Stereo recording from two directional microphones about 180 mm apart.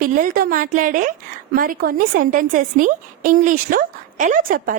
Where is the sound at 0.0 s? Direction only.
50° right (ahead or behind).